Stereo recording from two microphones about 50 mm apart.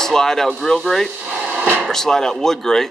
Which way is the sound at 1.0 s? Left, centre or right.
Right.